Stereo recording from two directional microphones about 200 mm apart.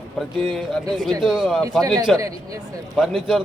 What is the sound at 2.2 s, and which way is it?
Speech, 15° right (ahead or behind).